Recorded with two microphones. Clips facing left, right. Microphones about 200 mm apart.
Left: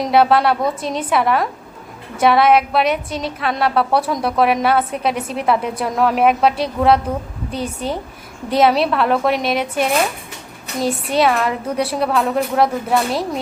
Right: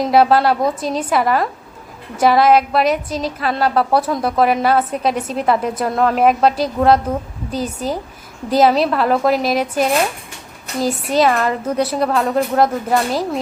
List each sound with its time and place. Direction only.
0.0 s a woman's voice: centre (ahead or behind)
7.5 s a woman's voice: 30° left (ahead or behind)
8.6 s a woman's voice: centre (ahead or behind)